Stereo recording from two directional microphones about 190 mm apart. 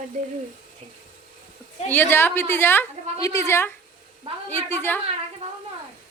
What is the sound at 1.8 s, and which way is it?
A woman's voice, 10° left (ahead or behind).